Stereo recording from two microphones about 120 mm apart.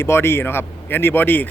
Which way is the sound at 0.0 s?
20° left (ahead or behind).